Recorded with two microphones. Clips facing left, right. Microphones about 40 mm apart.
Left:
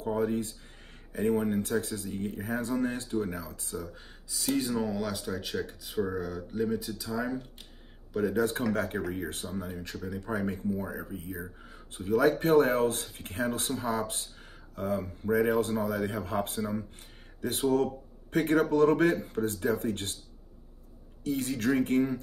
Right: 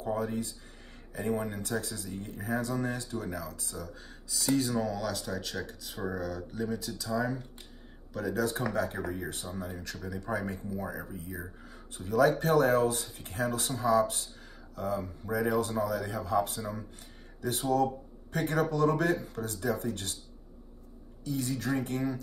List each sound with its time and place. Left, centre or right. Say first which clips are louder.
0.1 s speech: left 3 dB; left
3.7 s speech: left 3 dB; centre
8.5 s speech: left 1 dB; left
11.1 s speech: left 2 dB; left
21.2 s speech: left 3 dB; left